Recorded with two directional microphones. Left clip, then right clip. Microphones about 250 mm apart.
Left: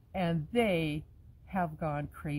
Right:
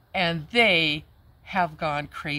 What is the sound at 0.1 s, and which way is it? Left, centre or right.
A woman's voice, centre.